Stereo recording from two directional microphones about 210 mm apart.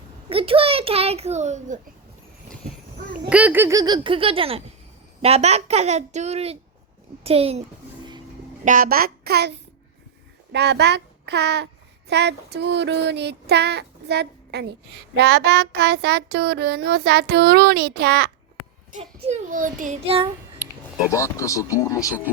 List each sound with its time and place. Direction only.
0.3 s a child's voice: 25° right (ahead or behind)
3.2 s a child's voice: 5° right (ahead or behind); by 7.6 s 30° right (ahead or behind)
8.6 s a child's voice: 40° right (ahead or behind)
18.9 s a woman's voice: 35° right (ahead or behind)
21.1 s speech: 15° left (ahead or behind)